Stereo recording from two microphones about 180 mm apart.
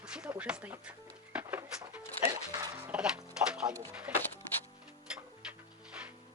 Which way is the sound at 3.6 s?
20° right (ahead or behind).